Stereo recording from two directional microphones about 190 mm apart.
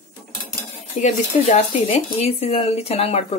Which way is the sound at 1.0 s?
35° left (ahead or behind).